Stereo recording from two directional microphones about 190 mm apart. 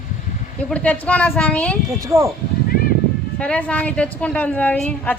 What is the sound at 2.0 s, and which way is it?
Speech, 15° right (ahead or behind).